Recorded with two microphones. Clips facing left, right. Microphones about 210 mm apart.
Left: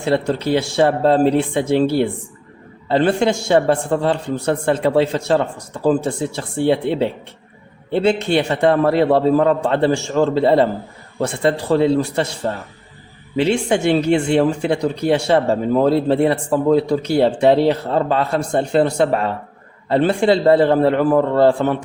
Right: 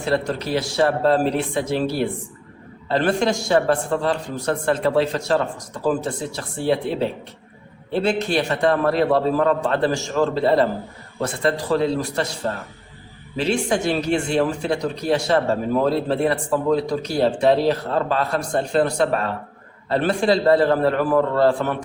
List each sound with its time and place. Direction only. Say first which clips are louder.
0.0 s a man's voice: left 4 dB; 25° left (ahead or behind)
13.3 s a man's voice: left 4 dB; 25° left (ahead or behind)